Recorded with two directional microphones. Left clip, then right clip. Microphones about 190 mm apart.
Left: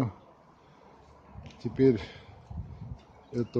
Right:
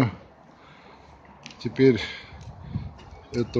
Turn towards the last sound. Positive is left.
turn(degrees=15)  # may be behind; listen again after turning